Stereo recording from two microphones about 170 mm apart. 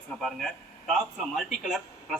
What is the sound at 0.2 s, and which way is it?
A man's voice, centre (ahead or behind).